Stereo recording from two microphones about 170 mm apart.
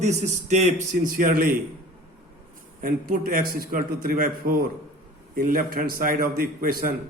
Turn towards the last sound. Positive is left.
turn(degrees=-60)  # may be behind; listen again after turning